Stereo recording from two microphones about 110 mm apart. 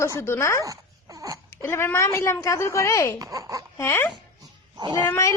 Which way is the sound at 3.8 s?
20° left (ahead or behind).